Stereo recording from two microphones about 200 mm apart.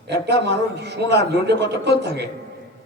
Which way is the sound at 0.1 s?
55° right (ahead or behind).